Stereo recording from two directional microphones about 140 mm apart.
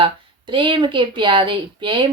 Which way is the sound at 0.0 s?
35° right (ahead or behind).